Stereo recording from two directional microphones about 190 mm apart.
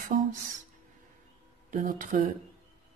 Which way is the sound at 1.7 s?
45° right (ahead or behind).